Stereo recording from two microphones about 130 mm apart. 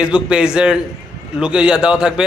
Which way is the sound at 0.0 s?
5° right (ahead or behind).